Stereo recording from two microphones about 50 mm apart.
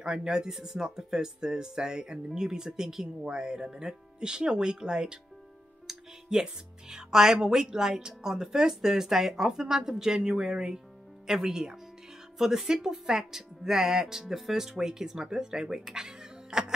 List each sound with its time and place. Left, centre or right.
0.0 s speech: centre